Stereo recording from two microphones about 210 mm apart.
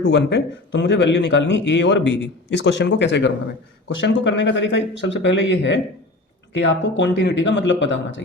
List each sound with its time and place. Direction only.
0.0 s a man's voice: 55° left (ahead or behind)